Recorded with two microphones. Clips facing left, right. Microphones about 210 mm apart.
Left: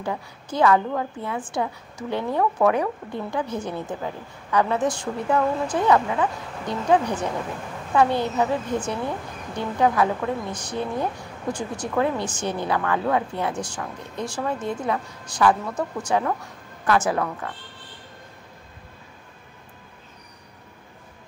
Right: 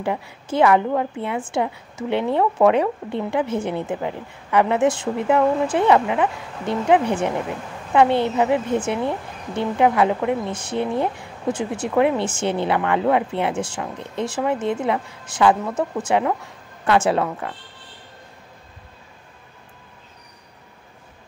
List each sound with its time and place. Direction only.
0.0 s a woman's voice: 25° right (ahead or behind)